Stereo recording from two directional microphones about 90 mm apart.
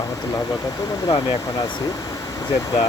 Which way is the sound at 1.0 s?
55° left (ahead or behind).